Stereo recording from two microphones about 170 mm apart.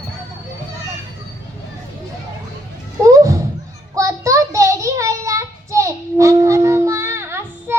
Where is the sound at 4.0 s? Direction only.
20° right (ahead or behind).